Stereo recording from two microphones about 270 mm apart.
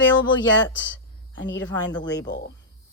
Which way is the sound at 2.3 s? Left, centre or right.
Left.